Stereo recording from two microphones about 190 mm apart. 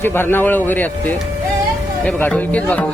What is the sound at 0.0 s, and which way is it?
Speech, 10° left (ahead or behind).